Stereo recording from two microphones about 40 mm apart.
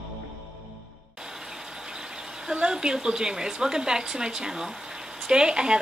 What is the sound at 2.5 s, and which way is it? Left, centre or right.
Speech, right.